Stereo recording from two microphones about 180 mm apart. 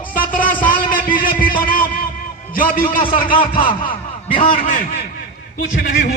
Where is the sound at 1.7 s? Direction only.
50° left (ahead or behind).